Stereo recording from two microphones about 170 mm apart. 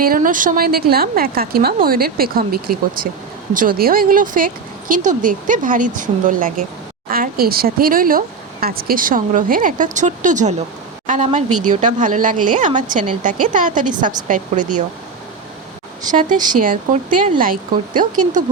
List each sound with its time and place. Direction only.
0.0 s a woman's voice: 55° right (ahead or behind)
16.1 s speech: 50° right (ahead or behind)